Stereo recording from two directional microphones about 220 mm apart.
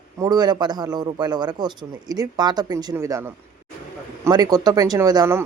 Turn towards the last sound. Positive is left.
turn(degrees=-15)  # may be behind; listen again after turning